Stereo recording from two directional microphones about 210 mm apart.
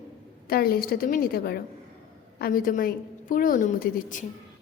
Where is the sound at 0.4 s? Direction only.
45° left (ahead or behind).